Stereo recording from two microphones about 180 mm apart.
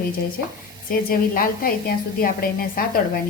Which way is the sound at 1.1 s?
55° left (ahead or behind).